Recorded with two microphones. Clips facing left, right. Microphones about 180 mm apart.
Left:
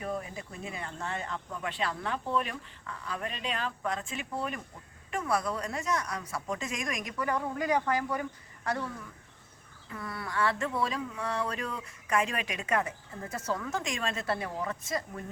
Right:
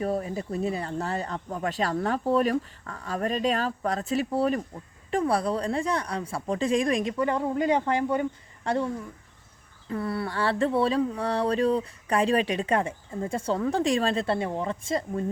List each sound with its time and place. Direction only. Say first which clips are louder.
0.0 s speech: right 8 dB; 35° right (ahead or behind)
9.9 s speech: right 8 dB; 30° right (ahead or behind)